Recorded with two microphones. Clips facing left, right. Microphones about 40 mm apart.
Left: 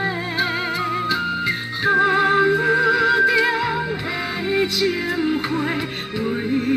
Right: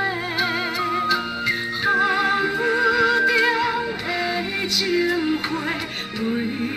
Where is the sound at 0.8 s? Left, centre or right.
Centre.